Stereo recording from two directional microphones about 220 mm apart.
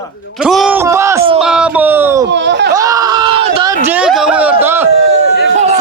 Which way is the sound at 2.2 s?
50° right (ahead or behind).